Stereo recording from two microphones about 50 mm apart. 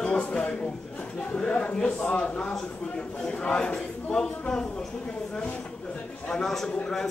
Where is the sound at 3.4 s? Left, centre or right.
Left.